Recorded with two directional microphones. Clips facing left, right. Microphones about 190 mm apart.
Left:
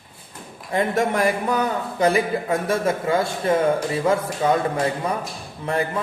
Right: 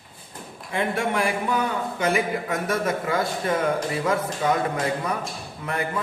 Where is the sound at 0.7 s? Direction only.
40° left (ahead or behind).